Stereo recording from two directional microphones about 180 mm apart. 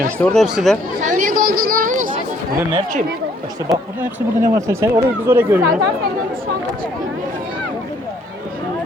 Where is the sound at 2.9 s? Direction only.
45° right (ahead or behind).